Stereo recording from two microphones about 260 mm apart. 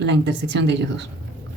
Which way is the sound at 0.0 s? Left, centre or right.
Right.